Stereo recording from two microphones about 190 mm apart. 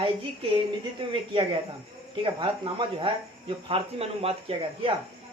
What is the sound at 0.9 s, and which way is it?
Speech, 25° right (ahead or behind).